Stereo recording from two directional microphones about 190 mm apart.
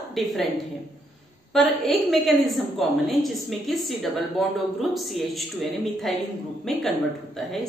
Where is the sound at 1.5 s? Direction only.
Centre (ahead or behind).